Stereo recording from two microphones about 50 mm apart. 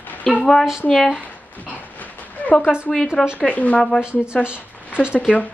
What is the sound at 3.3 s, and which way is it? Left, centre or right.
Speech, left.